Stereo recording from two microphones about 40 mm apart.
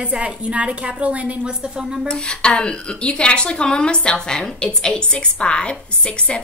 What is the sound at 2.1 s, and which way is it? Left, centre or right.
Speech, left.